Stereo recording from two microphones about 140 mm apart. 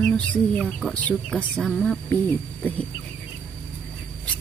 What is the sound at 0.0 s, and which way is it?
A woman's voice, 5° left (ahead or behind).